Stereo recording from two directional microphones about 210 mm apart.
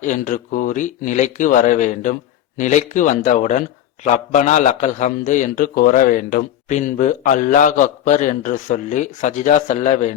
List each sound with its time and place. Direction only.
0.0 s a man's voice: 35° left (ahead or behind)